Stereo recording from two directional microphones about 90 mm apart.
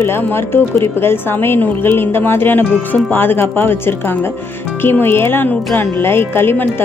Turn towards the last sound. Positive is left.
turn(degrees=20)  # may be behind; listen again after turning